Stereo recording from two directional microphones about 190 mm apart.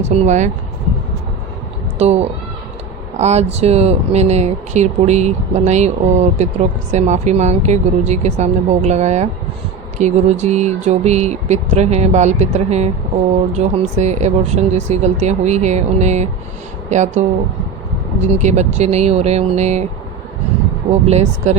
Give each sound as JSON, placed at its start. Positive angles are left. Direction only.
{"t": 0.0, "sound": "speech", "side_deg": -35}
{"t": 2.0, "sound": "speech", "side_deg": -35}
{"t": 21.1, "sound": "speech", "side_deg": -35}